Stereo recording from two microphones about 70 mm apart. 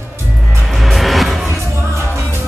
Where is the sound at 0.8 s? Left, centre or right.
Centre.